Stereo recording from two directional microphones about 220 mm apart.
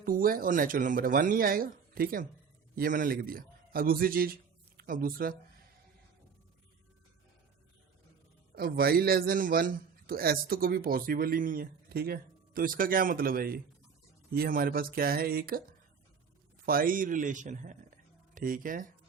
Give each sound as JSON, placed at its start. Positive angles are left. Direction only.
{"t": 0.0, "sound": "a man's voice", "side_deg": -40}
{"t": 8.5, "sound": "a man's voice", "side_deg": -45}
{"t": 16.6, "sound": "a man's voice", "side_deg": -40}